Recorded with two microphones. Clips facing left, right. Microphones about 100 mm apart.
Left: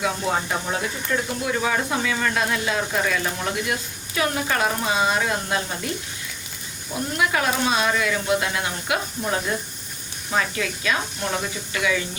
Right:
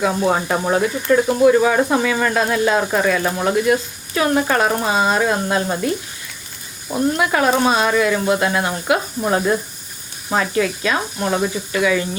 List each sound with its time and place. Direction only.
0.0 s speech: 55° right (ahead or behind)
7.2 s speech: 45° right (ahead or behind)